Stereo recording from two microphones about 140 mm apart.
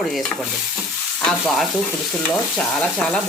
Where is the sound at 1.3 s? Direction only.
Centre (ahead or behind).